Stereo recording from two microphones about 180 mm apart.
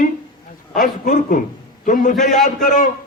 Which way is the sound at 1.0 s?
45° left (ahead or behind).